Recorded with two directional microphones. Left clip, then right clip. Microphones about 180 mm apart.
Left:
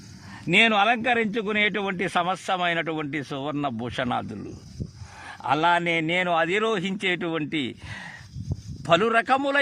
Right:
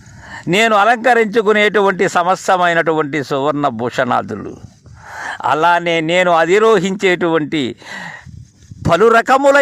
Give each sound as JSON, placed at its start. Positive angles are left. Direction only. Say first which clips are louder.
{"t": 0.3, "sound": "a man's voice", "louder": "right 7 dB", "side_deg": -35}